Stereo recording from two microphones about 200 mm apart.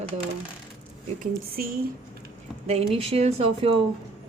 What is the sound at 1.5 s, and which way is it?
Speech, 50° right (ahead or behind).